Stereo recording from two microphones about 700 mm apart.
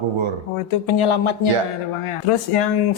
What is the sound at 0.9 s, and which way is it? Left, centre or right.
Speech, left.